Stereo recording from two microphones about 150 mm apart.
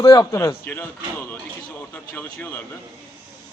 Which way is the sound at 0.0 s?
25° left (ahead or behind).